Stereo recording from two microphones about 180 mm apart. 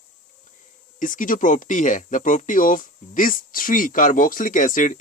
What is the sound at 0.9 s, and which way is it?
Speech, 45° left (ahead or behind).